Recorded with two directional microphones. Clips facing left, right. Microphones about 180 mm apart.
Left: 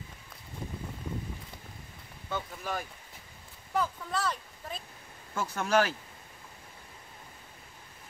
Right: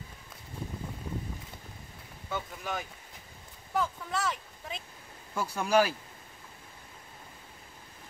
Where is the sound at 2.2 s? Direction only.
Centre (ahead or behind).